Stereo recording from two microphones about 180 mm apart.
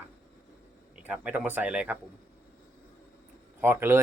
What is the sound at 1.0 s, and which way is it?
Speech, 10° right (ahead or behind).